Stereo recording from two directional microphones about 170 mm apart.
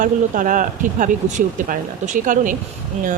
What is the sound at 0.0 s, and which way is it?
Speech, 50° right (ahead or behind).